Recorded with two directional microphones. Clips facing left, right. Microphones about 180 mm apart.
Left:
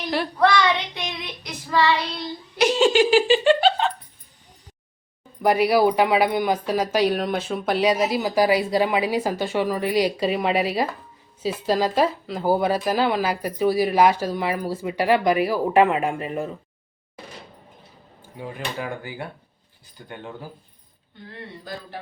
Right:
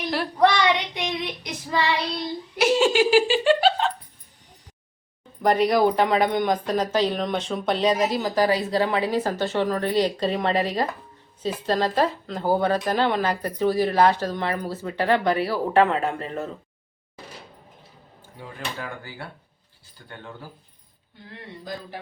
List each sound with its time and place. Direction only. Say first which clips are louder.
0.3 s child singing: even; 20° right (ahead or behind)
2.6 s laughter: left 2 dB; 5° right (ahead or behind)
5.4 s speech: left 1 dB; 10° left (ahead or behind)
18.3 s speech: left 4 dB; 15° left (ahead or behind)